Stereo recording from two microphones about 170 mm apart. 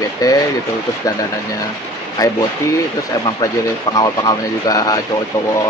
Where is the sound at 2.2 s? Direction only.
20° left (ahead or behind).